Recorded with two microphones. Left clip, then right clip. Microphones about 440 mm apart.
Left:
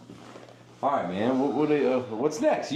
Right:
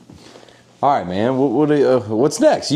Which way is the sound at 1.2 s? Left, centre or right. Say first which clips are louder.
Right 8 dB; right.